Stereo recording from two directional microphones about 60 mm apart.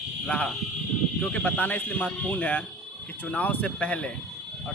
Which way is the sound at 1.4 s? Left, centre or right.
Left.